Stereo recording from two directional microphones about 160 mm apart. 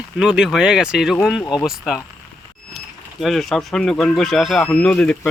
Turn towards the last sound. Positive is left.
turn(degrees=10)  # may be behind; listen again after turning